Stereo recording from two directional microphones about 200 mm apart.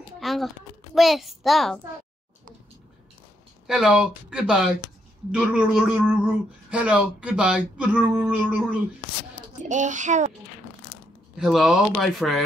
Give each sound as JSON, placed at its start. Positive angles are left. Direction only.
{"t": 0.2, "sound": "a sound", "side_deg": 0}
{"t": 0.9, "sound": "speech", "side_deg": 0}
{"t": 3.6, "sound": "speech", "side_deg": -5}
{"t": 9.6, "sound": "speech", "side_deg": -40}
{"t": 11.3, "sound": "speech", "side_deg": 0}